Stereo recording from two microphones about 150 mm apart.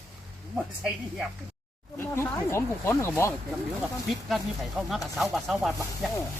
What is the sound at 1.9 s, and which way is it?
Speech, 15° left (ahead or behind).